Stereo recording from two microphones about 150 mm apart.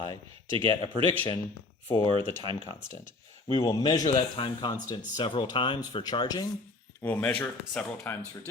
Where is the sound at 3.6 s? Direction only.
25° left (ahead or behind).